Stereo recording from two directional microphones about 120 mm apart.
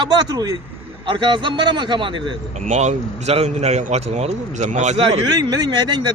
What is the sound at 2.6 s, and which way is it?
A man's voice, 75° right (ahead or behind).